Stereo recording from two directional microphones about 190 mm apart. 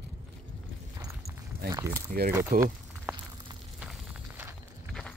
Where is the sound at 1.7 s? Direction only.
15° right (ahead or behind).